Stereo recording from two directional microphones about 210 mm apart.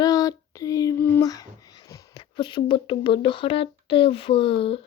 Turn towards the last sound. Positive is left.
turn(degrees=25)  # may be behind; listen again after turning